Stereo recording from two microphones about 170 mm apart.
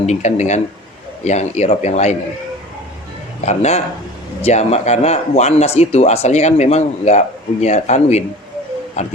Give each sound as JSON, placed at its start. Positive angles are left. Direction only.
{"t": 0.0, "sound": "speech", "side_deg": 45}
{"t": 3.4, "sound": "speech", "side_deg": 40}